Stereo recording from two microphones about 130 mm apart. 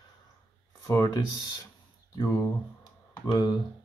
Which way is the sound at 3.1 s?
30° left (ahead or behind).